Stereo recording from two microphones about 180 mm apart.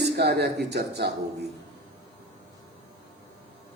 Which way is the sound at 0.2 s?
65° right (ahead or behind).